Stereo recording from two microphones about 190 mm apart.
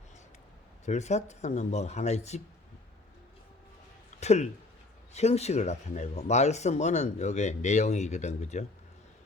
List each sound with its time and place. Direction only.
0.9 s speech: 35° left (ahead or behind)
4.2 s speech: 35° left (ahead or behind)